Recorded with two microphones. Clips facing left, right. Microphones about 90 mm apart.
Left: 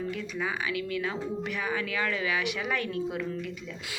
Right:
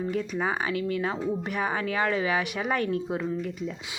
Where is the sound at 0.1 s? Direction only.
40° right (ahead or behind).